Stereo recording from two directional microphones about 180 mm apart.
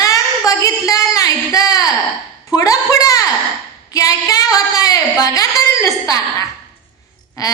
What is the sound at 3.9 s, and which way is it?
Speech, 20° left (ahead or behind).